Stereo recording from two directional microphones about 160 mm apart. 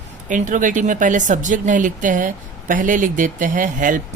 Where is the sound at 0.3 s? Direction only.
55° right (ahead or behind).